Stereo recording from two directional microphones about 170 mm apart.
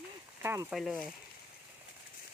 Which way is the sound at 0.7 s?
Centre (ahead or behind).